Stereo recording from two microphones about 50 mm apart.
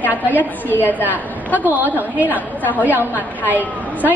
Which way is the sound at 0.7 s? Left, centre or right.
Left.